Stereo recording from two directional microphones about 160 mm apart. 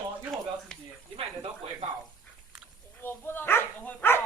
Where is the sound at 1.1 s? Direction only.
35° right (ahead or behind).